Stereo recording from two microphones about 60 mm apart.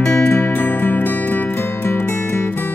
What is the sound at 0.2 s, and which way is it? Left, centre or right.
Music, left.